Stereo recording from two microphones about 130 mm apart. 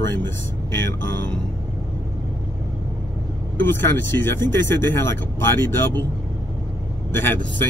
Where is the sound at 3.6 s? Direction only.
15° left (ahead or behind).